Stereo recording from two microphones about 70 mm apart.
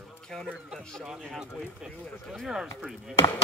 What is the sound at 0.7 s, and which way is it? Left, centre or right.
Chop, centre.